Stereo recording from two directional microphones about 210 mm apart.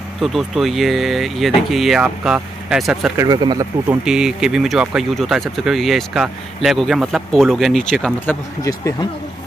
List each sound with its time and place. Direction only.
0.2 s speech: centre (ahead or behind)
3.2 s speech: 15° right (ahead or behind)
4.0 s speech: 5° right (ahead or behind)